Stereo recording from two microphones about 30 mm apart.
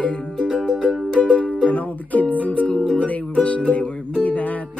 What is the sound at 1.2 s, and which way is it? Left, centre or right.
Music, left.